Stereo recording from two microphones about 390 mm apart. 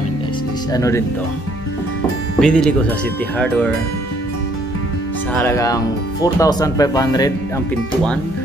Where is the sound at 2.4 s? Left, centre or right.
Centre.